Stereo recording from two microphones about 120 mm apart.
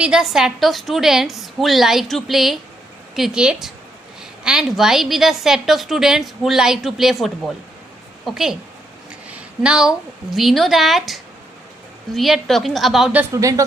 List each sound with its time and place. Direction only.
0.0 s a woman's voice: 5° right (ahead or behind)
13.3 s speech: 25° right (ahead or behind)